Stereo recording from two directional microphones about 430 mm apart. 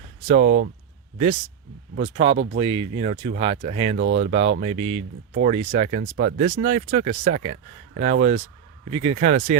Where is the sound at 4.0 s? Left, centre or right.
Right.